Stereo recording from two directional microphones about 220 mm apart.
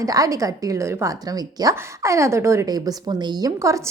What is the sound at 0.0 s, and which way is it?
A woman's voice, 15° right (ahead or behind).